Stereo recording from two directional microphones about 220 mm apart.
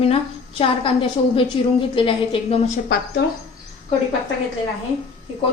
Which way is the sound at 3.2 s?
45° left (ahead or behind).